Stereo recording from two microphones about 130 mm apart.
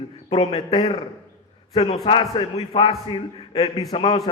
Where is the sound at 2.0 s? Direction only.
40° left (ahead or behind).